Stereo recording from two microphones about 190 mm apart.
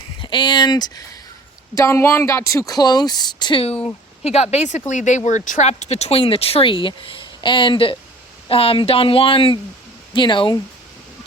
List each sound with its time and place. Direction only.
0.2 s speech: 25° left (ahead or behind)